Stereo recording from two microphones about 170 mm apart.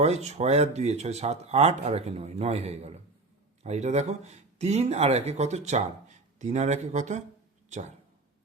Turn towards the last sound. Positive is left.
turn(degrees=-45)  # may be behind; listen again after turning